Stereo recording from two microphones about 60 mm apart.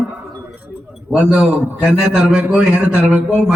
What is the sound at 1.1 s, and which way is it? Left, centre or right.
A man's voice, centre.